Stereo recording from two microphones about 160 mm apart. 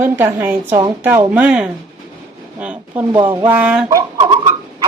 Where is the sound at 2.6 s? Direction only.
10° right (ahead or behind).